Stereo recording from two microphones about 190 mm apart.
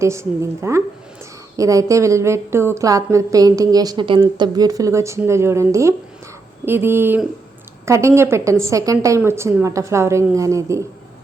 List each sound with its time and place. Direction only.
0.0 s a woman's voice: 15° right (ahead or behind)